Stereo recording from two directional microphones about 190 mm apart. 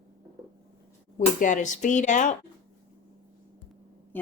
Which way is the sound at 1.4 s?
40° left (ahead or behind).